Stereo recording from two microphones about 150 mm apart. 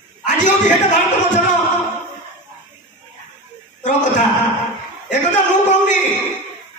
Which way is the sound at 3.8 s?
55° left (ahead or behind).